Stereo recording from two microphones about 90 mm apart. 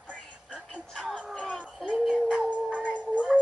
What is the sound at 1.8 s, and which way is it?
Music, 10° right (ahead or behind).